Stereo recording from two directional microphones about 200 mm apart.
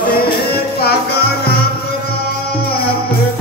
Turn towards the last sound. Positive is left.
turn(degrees=50)  # may be behind; listen again after turning